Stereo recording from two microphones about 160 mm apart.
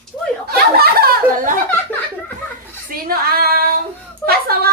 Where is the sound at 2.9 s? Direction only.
70° right (ahead or behind).